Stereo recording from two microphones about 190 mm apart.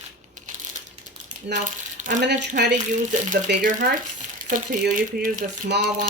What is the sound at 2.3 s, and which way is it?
Speech, 40° right (ahead or behind).